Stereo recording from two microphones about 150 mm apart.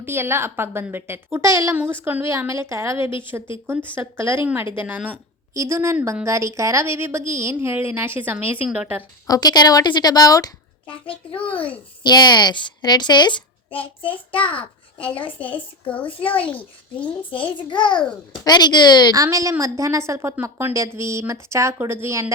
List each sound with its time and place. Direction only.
0.0 s a woman's voice: 15° right (ahead or behind)
3.1 s a child's voice: 35° left (ahead or behind)
3.9 s a woman's voice: 15° right (ahead or behind)
9.2 s a woman's voice: 25° left (ahead or behind)
12.0 s a woman's voice: 30° left (ahead or behind)
14.5 s a child's voice: 10° left (ahead or behind)
17.3 s a child's voice: 35° left (ahead or behind)
19.1 s a woman's voice: 20° right (ahead or behind)